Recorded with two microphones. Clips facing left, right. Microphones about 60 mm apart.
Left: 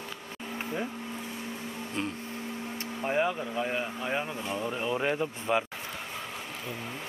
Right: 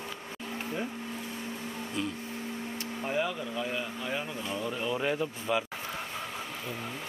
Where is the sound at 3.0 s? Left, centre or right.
Left.